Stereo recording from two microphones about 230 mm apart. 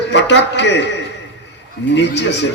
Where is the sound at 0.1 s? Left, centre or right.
Left.